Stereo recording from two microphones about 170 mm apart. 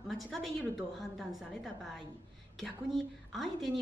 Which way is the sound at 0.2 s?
Centre (ahead or behind).